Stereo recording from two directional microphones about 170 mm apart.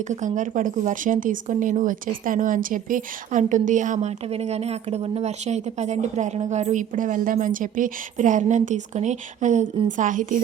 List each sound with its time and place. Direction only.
0.3 s speech: 50° right (ahead or behind)